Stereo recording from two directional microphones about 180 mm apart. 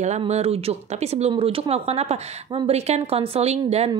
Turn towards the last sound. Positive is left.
turn(degrees=-35)  # may be behind; listen again after turning